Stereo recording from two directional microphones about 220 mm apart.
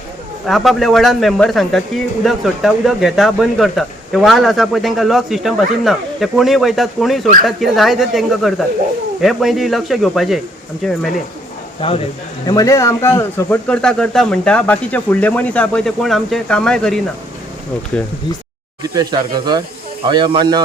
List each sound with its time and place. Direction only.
0.4 s speech: centre (ahead or behind)
11.8 s speech: 25° left (ahead or behind)
12.5 s speech: 15° left (ahead or behind)
18.8 s speech: 15° right (ahead or behind)